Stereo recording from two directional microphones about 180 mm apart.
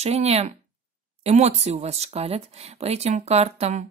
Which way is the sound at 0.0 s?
35° right (ahead or behind).